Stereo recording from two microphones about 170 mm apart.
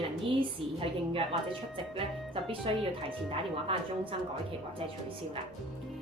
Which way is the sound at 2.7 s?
35° right (ahead or behind).